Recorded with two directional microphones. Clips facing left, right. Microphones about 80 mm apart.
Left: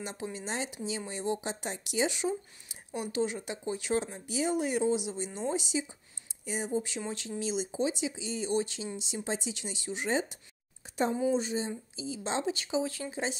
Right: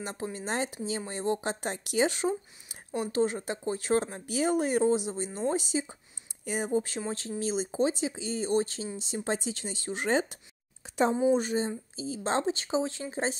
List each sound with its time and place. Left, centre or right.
0.0 s speech: right
10.0 s speech: right